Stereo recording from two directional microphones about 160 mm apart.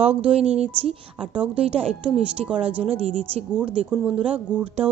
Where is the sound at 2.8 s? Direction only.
40° right (ahead or behind).